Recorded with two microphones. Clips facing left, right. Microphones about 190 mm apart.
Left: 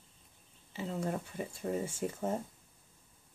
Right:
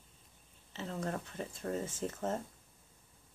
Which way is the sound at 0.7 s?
10° left (ahead or behind).